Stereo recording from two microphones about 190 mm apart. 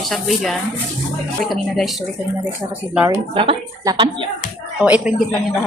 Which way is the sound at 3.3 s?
30° right (ahead or behind).